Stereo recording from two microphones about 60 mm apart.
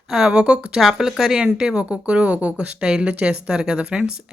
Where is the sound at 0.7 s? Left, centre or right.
Centre.